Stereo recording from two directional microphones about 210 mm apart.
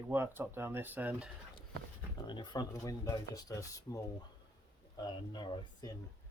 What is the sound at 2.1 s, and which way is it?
Speech, 20° left (ahead or behind).